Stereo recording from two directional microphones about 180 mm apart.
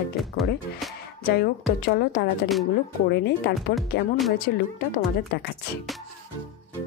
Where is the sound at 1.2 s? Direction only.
60° left (ahead or behind).